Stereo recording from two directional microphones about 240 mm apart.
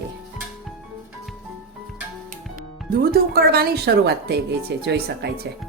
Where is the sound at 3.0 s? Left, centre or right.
Right.